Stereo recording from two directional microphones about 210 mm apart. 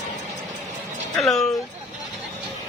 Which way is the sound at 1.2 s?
Centre (ahead or behind).